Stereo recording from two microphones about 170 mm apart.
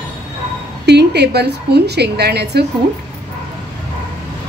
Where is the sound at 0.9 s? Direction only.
75° right (ahead or behind).